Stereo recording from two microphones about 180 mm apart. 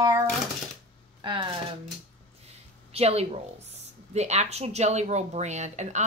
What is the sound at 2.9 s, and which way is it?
Speech, 35° right (ahead or behind).